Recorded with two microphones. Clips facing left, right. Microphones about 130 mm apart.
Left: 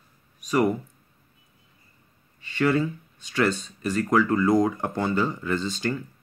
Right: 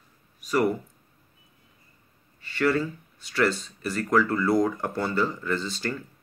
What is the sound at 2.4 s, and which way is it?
Speech, 15° left (ahead or behind).